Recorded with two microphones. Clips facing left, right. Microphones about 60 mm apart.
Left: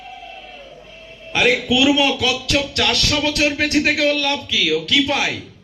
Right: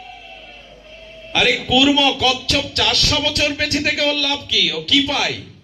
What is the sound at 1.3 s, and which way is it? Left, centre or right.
Music, centre.